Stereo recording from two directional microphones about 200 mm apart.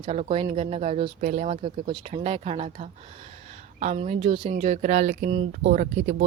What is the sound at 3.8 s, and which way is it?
Speech, 35° right (ahead or behind).